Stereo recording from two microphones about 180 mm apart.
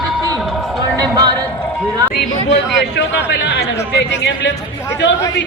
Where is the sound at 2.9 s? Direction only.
70° left (ahead or behind).